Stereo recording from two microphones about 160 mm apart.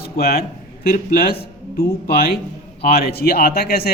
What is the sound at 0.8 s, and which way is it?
A man's voice, 65° left (ahead or behind).